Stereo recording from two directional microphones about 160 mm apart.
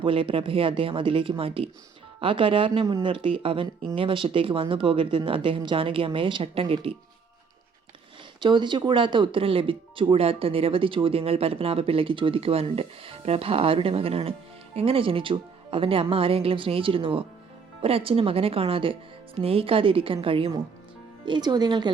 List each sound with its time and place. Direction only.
0.0 s speech: 35° right (ahead or behind)
8.4 s speech: 30° right (ahead or behind)